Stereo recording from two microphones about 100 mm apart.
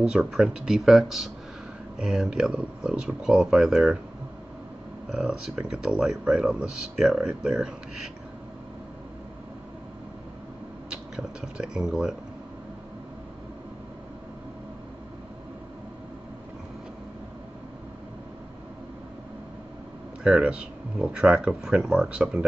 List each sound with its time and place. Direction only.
0.0 s speech: 10° right (ahead or behind)
5.1 s speech: 5° right (ahead or behind)
10.9 s speech: 10° right (ahead or behind)
20.2 s speech: 10° right (ahead or behind)